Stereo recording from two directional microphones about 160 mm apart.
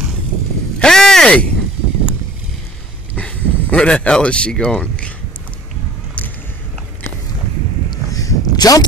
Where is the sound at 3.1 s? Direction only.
5° left (ahead or behind).